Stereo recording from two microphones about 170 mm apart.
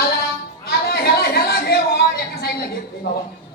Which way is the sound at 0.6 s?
65° left (ahead or behind).